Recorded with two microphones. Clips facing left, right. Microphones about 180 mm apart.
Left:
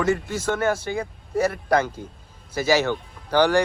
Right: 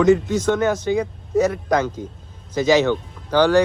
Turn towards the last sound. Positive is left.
turn(degrees=10)  # may be behind; listen again after turning